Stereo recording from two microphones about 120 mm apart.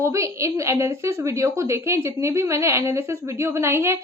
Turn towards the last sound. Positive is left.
turn(degrees=-20)  # may be behind; listen again after turning